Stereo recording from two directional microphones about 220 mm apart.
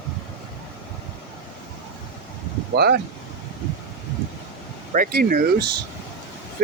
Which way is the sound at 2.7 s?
45° right (ahead or behind).